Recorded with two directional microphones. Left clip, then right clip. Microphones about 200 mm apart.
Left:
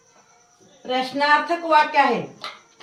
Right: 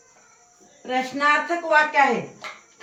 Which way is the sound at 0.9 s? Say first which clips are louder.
Left 2 dB; 15° left (ahead or behind).